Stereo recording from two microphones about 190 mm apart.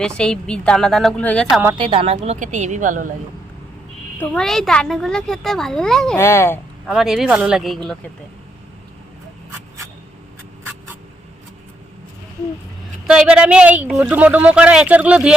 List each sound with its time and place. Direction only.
0.0 s speech: 5° left (ahead or behind)
1.8 s a woman's voice: 30° right (ahead or behind)
4.2 s speech: 5° left (ahead or behind)
6.1 s a child's voice: 15° left (ahead or behind)
6.8 s speech: centre (ahead or behind)
13.1 s a woman's voice: 5° right (ahead or behind)